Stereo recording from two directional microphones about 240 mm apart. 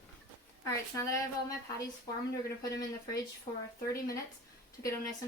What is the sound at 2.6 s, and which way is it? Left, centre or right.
Speech, centre.